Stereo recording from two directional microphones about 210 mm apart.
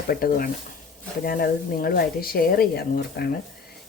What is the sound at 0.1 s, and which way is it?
A woman's voice, 45° left (ahead or behind).